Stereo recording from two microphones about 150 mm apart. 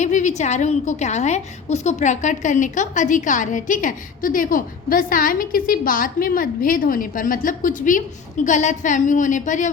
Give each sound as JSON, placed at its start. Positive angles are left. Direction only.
{"t": 0.0, "sound": "a woman's voice", "side_deg": 55}